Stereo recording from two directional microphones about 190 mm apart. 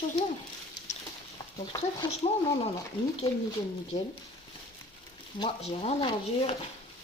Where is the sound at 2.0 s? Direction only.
25° left (ahead or behind).